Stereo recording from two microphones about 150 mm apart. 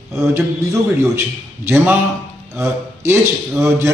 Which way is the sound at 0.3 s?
15° right (ahead or behind).